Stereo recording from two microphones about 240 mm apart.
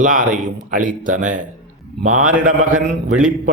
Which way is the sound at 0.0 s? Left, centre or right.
Right.